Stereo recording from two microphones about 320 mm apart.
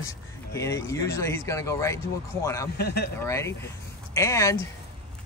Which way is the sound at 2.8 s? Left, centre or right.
Left.